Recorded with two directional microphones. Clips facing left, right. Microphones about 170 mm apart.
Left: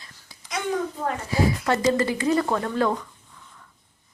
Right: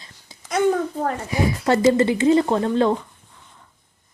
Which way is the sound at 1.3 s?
25° right (ahead or behind).